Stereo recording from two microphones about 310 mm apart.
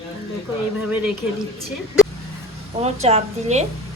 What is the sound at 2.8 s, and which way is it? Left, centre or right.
Speech, centre.